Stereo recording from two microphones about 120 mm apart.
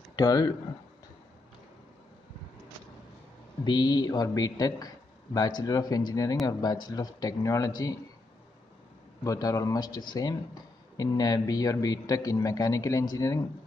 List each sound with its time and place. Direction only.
0.1 s speech: 30° left (ahead or behind)
3.6 s speech: 40° left (ahead or behind)
9.2 s speech: 30° left (ahead or behind)